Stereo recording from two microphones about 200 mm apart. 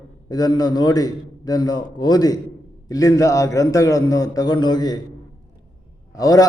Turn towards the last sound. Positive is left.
turn(degrees=20)  # may be behind; listen again after turning